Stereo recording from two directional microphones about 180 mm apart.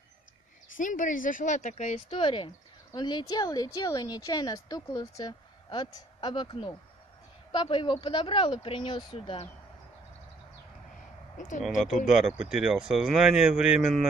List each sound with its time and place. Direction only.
0.7 s speech: 50° left (ahead or behind); by 9.5 s 30° left (ahead or behind)
11.3 s speech: 45° left (ahead or behind)
11.6 s speech: centre (ahead or behind)